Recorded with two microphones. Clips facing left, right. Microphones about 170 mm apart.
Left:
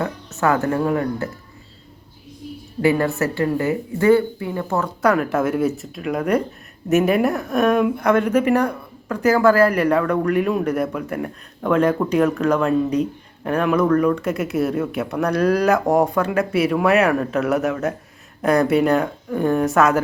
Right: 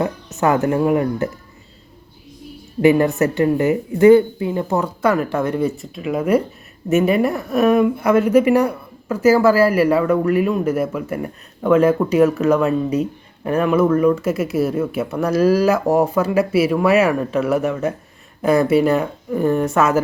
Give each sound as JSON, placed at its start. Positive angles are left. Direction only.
{"t": 0.0, "sound": "speech", "side_deg": -20}
{"t": 2.8, "sound": "speech", "side_deg": -20}
{"t": 5.0, "sound": "speech", "side_deg": 0}